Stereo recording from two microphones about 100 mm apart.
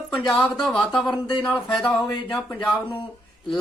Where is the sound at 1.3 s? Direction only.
50° left (ahead or behind).